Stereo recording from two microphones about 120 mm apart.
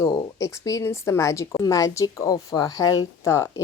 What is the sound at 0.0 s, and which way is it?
A woman's voice, 25° left (ahead or behind).